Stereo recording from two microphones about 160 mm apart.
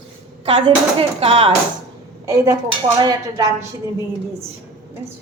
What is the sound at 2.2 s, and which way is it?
A woman's voice, 20° right (ahead or behind).